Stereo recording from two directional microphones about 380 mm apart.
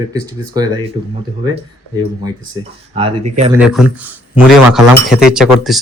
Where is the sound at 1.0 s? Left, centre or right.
Right.